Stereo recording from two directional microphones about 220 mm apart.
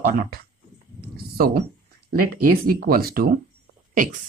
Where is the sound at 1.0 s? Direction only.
45° right (ahead or behind).